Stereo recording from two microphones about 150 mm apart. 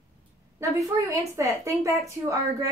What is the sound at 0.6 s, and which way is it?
A woman's voice, 20° right (ahead or behind).